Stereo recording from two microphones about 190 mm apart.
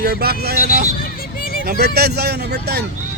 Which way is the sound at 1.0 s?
50° left (ahead or behind).